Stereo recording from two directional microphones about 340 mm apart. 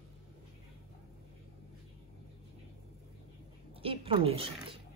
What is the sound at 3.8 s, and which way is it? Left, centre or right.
A woman's voice, centre.